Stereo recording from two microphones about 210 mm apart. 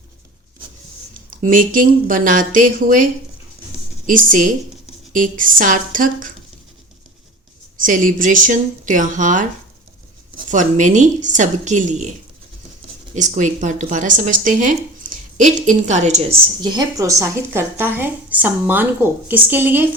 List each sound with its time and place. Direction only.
1.1 s speech: 40° right (ahead or behind)
7.8 s speech: 40° right (ahead or behind)
13.1 s speech: 35° right (ahead or behind)
16.6 s speech: 20° right (ahead or behind)